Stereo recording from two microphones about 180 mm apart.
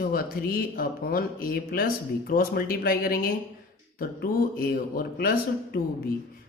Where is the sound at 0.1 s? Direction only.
55° left (ahead or behind).